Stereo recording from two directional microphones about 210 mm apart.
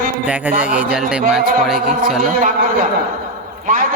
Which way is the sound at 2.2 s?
40° right (ahead or behind).